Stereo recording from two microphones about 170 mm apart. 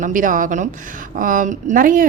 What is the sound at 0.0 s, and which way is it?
Speech, 50° right (ahead or behind).